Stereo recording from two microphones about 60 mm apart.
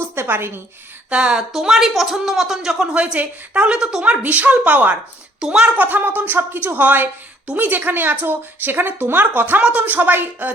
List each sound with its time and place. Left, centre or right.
0.0 s a sound: right
1.1 s speech: centre
1.4 s speech: centre
4.2 s a woman's voice: right
9.6 s speech: centre
9.8 s speech: right